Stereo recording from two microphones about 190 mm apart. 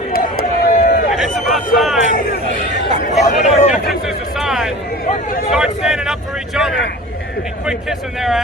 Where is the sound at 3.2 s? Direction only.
35° left (ahead or behind).